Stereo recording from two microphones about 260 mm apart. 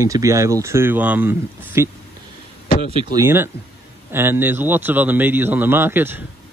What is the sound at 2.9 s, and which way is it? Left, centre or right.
Speech, centre.